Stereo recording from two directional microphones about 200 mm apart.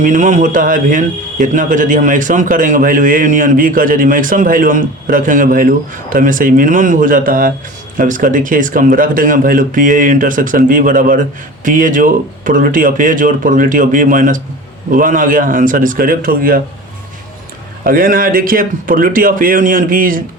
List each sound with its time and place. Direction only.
0.0 s speech: 40° right (ahead or behind)
17.8 s speech: 45° right (ahead or behind)